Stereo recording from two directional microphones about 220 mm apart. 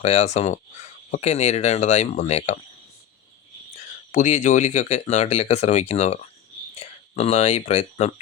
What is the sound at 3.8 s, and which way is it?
A man's voice, 35° left (ahead or behind).